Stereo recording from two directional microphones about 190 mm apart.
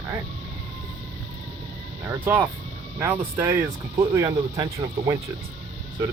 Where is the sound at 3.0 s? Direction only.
10° right (ahead or behind).